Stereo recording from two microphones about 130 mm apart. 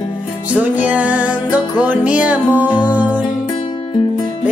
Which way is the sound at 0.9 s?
10° right (ahead or behind).